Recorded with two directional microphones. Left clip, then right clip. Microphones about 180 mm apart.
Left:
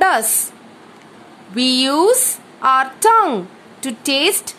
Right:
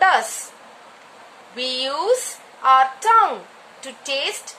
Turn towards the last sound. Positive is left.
turn(degrees=60)  # may be behind; listen again after turning